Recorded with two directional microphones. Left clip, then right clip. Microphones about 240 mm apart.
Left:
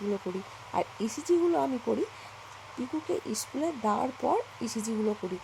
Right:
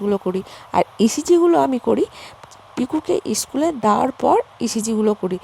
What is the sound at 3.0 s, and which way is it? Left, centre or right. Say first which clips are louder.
Speech: right 12 dB; right.